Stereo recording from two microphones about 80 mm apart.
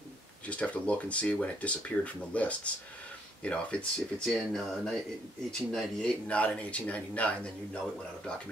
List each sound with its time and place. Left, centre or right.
0.5 s speech: centre